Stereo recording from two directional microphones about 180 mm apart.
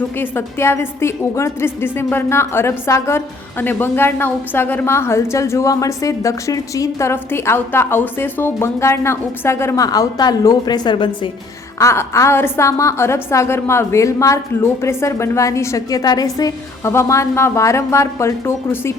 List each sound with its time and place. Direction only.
0.2 s a woman's voice: 15° left (ahead or behind)
11.8 s a woman's voice: 15° left (ahead or behind)